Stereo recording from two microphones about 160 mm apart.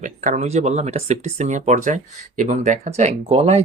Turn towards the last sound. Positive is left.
turn(degrees=-40)  # may be behind; listen again after turning